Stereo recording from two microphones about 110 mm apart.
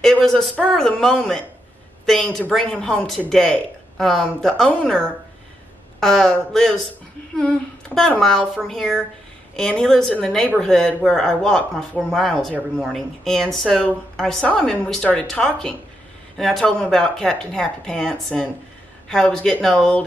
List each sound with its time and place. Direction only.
0.0 s a woman's voice: 5° left (ahead or behind)